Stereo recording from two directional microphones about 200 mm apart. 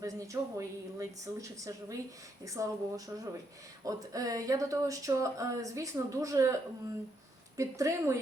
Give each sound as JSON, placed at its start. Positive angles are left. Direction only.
{"t": 0.0, "sound": "speech", "side_deg": -15}